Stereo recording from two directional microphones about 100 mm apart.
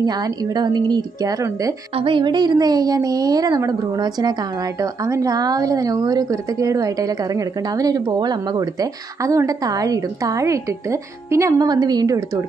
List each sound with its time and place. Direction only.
0.0 s a woman's voice: 40° right (ahead or behind)
2.0 s speech: 60° right (ahead or behind); by 12.4 s 40° right (ahead or behind)